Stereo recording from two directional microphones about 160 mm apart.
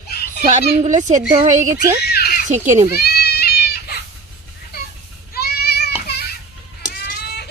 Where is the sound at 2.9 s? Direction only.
85° left.